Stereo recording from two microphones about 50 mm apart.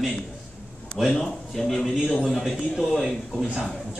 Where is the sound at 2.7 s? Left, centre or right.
Centre.